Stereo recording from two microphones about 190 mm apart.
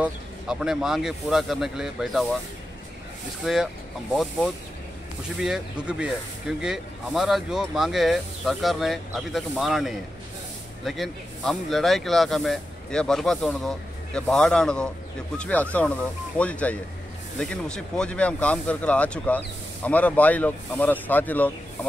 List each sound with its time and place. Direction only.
0.0 s speech: 5° right (ahead or behind)
3.4 s speech: 5° right (ahead or behind)